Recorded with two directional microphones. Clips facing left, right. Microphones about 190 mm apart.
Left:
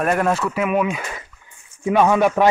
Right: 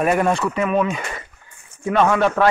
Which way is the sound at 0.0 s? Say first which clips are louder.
Right 1 dB; centre (ahead or behind).